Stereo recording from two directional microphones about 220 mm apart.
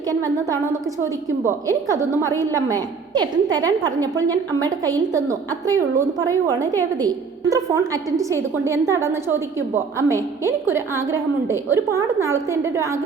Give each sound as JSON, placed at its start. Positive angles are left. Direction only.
{"t": 0.1, "sound": "a woman's voice", "side_deg": -15}